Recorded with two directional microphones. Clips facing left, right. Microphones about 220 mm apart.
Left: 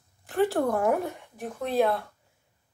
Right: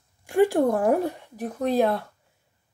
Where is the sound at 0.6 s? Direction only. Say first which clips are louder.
Right 4 dB; 30° right (ahead or behind).